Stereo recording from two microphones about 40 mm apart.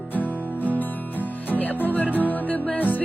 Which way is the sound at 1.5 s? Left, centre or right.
Left.